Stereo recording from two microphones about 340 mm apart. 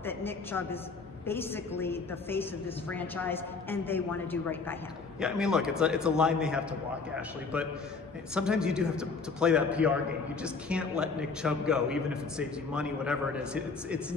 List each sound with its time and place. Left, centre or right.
0.0 s a woman's voice: centre